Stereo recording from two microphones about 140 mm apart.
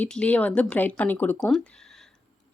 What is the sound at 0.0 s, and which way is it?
Speech, 10° left (ahead or behind).